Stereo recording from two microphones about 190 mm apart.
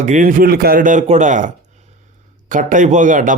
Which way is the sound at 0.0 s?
40° right (ahead or behind).